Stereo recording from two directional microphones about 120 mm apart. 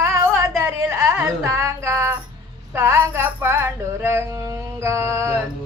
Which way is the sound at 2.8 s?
25° right (ahead or behind).